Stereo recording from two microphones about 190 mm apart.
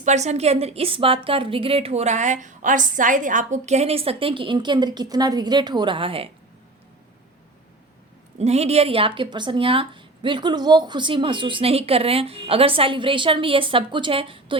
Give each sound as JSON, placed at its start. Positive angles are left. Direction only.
{"t": 0.0, "sound": "a woman's voice", "side_deg": -35}
{"t": 8.4, "sound": "a woman's voice", "side_deg": -35}